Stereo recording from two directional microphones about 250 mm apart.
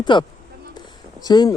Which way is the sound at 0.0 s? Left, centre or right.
Centre.